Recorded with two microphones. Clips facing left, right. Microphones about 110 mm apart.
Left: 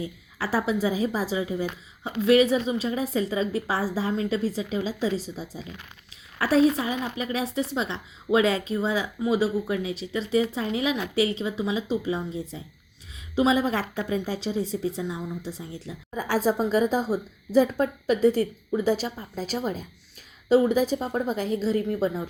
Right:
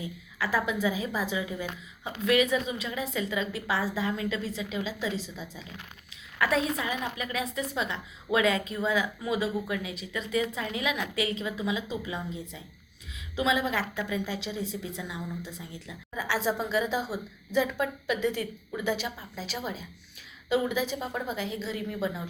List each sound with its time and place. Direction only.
0.0 s a woman's voice: 35° left (ahead or behind)